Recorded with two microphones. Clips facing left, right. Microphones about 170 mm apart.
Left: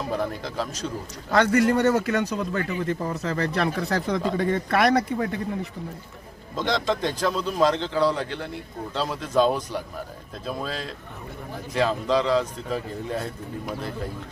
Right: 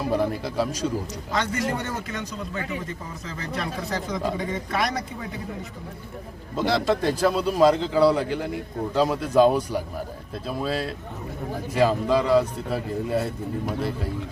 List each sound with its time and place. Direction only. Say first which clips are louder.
0.1 s a man's voice: right 6 dB; 10° right (ahead or behind)
1.3 s speech: left 7 dB; 55° left (ahead or behind)
6.6 s a man's voice: right 2 dB; 5° right (ahead or behind)